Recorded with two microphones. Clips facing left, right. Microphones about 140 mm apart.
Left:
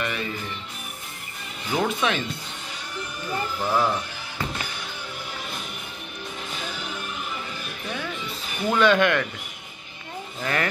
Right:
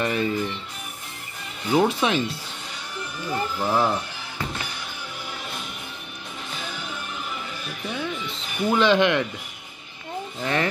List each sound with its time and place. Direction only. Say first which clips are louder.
0.0 s speech: right 5 dB; 30° right (ahead or behind)
1.7 s speech: right 4 dB; 30° right (ahead or behind)
3.6 s speech: right 1 dB; 20° right (ahead or behind)
8.7 s speech: even; 20° right (ahead or behind)
10.4 s speech: right 2 dB; 25° right (ahead or behind)